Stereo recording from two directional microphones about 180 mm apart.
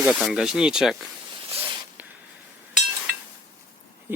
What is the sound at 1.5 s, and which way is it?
Spray, 35° right (ahead or behind).